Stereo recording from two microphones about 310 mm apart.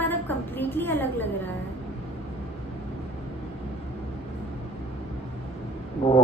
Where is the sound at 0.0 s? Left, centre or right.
Centre.